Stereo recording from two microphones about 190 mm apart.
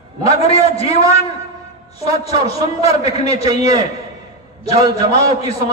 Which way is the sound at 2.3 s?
30° left (ahead or behind).